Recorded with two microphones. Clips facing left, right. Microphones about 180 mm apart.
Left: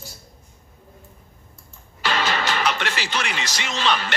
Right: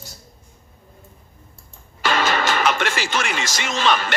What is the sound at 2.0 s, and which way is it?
Music, 50° right (ahead or behind).